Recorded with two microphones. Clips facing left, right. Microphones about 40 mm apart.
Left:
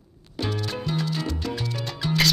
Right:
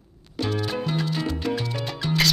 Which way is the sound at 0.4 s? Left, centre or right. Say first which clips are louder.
Right 3 dB; centre.